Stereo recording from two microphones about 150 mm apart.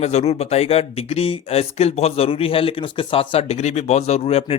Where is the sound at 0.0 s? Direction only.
45° left (ahead or behind).